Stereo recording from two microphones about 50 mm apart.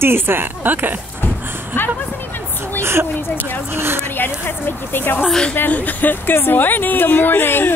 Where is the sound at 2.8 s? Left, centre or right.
Right.